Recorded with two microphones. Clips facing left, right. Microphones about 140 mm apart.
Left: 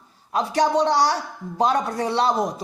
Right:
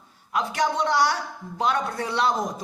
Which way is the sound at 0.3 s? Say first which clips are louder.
Left 4 dB; 35° left (ahead or behind).